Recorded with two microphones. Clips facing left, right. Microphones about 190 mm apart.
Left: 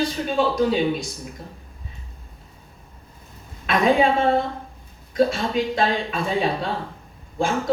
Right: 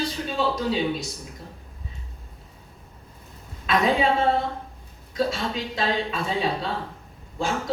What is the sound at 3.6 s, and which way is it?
A woman's voice, 55° left (ahead or behind).